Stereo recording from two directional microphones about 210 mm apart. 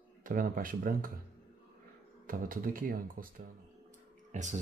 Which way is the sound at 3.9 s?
35° right (ahead or behind).